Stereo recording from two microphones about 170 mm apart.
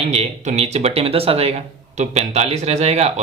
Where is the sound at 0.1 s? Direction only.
40° right (ahead or behind).